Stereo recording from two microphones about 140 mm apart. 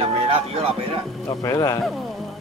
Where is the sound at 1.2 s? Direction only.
25° left (ahead or behind).